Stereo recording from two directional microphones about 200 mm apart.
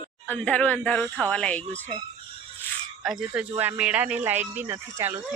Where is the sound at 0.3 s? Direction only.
5° left (ahead or behind).